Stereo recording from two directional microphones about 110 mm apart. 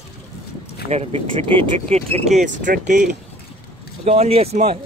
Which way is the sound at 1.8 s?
80° right.